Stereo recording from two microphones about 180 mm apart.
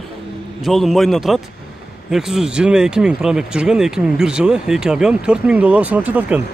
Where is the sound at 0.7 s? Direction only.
Centre (ahead or behind).